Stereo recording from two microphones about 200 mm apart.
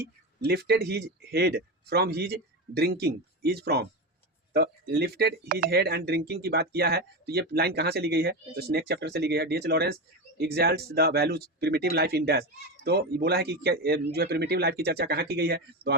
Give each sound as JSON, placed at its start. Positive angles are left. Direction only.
{"t": 0.0, "sound": "speech", "side_deg": -55}